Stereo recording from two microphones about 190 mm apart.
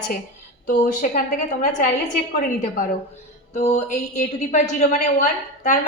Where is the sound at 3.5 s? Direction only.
35° left (ahead or behind).